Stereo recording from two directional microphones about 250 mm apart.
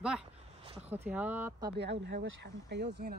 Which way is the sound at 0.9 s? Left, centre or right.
Centre.